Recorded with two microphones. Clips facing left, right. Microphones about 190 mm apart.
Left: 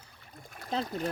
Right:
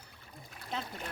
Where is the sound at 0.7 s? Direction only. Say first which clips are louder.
Left 7 dB; 35° left (ahead or behind).